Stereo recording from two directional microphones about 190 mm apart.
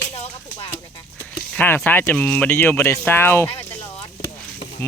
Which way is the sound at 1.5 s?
10° left (ahead or behind).